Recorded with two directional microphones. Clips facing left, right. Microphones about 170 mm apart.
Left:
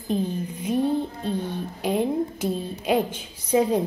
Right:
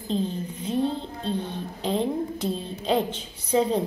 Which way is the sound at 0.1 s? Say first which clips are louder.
Left 2 dB; 15° left (ahead or behind).